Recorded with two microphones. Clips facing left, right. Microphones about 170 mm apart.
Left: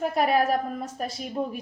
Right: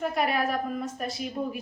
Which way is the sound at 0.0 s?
40° left (ahead or behind).